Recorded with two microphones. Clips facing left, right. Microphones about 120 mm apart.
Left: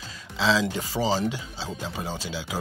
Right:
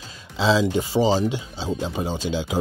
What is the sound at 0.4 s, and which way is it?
Speech, 15° right (ahead or behind).